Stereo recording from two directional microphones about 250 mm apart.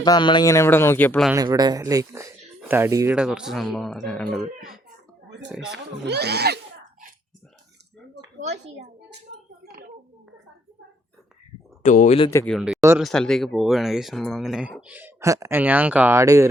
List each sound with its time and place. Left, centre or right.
0.0 s speech: centre
1.3 s speech: centre
6.1 s speech: right
11.8 s speech: left
12.3 s speech: centre
12.5 s speech: centre